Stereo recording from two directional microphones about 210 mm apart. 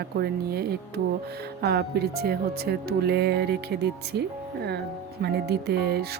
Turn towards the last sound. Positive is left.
turn(degrees=-50)  # may be behind; listen again after turning